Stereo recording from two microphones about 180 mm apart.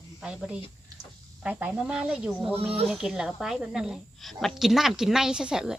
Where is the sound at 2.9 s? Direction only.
5° right (ahead or behind).